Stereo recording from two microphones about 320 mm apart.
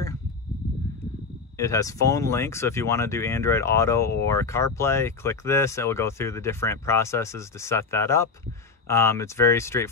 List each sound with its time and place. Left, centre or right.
1.6 s speech: centre